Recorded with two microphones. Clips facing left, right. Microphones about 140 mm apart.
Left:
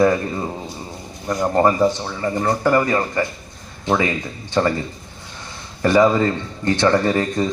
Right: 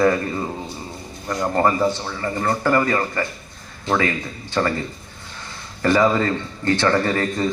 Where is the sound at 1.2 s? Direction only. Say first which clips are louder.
Left 3 dB; 15° left (ahead or behind).